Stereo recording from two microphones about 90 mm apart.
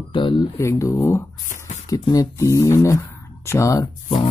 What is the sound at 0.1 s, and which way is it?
Speech, 65° left (ahead or behind).